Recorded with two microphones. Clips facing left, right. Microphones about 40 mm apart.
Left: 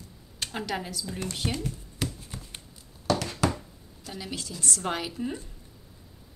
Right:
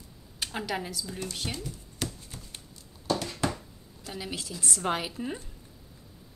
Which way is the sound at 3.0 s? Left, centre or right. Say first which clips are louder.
Left 3 dB; left.